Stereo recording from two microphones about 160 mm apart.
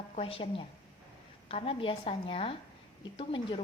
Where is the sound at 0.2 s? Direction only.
35° left (ahead or behind).